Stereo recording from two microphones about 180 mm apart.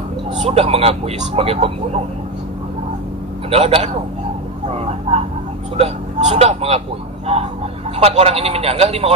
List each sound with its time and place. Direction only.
0.4 s speech: 35° right (ahead or behind)
3.4 s speech: 35° right (ahead or behind)
8.0 s speech: 35° right (ahead or behind)